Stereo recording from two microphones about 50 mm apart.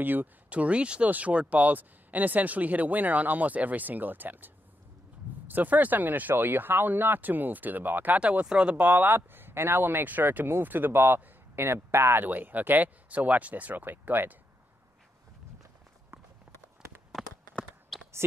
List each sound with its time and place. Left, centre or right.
0.0 s speech: right
0.5 s speech: right
5.5 s speech: right
8.2 s speech: right
8.8 s speech: right